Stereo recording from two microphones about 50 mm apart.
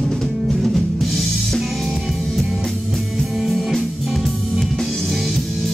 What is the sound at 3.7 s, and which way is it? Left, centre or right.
Music, centre.